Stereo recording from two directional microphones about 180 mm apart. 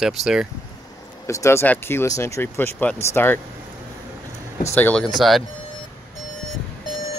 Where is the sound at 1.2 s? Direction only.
15° left (ahead or behind).